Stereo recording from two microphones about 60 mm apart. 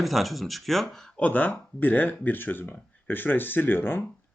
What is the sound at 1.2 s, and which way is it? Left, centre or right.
Speech, left.